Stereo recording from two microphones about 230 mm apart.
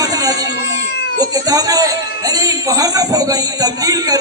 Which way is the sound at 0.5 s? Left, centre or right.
Left.